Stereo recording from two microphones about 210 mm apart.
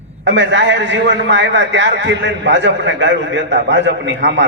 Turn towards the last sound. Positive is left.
turn(degrees=-60)  # may be behind; listen again after turning